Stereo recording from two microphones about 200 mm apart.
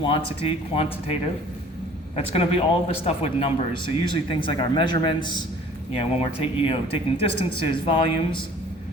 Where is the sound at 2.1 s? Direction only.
30° left (ahead or behind).